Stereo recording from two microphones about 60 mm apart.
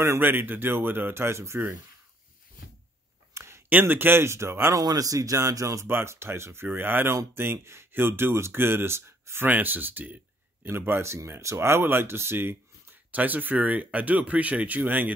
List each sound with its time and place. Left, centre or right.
0.2 s speech: right
3.3 s a sound: right
3.8 s speech: right
4.7 s speech: right
5.9 s speech: right
9.5 s speech: right
10.7 s speech: right
13.1 s speech: right